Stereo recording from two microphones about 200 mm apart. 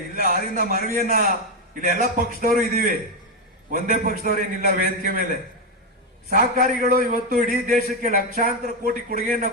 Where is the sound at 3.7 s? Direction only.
40° right (ahead or behind).